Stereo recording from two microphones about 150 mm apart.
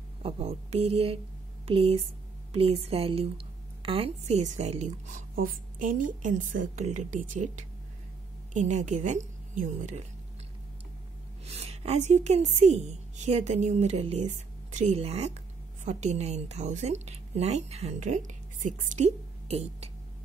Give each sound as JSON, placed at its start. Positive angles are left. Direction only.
{"t": 0.2, "sound": "a woman's voice", "side_deg": -40}
{"t": 11.4, "sound": "a woman's voice", "side_deg": -45}